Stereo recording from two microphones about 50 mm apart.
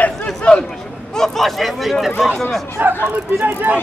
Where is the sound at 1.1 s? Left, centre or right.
Centre.